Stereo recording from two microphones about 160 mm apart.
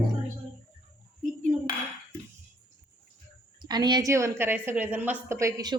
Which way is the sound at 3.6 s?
25° right (ahead or behind).